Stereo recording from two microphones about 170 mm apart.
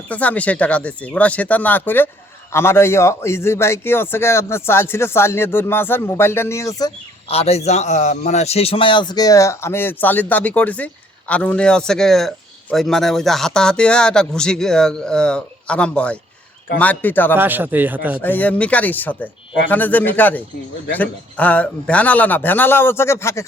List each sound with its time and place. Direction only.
0.1 s a man's voice: 10° left (ahead or behind)
7.3 s a man's voice: 35° left (ahead or behind); by 17.3 s 10° left (ahead or behind)
17.3 s speech: 10° right (ahead or behind)
18.2 s a man's voice: 10° left (ahead or behind)